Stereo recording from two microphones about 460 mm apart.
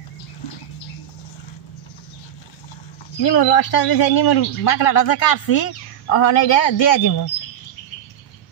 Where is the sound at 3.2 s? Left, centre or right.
Left.